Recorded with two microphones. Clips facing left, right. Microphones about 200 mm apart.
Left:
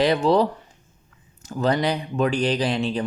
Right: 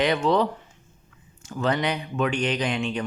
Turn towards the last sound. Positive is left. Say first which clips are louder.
# left 3 dB
turn(degrees=35)  # may be behind; listen again after turning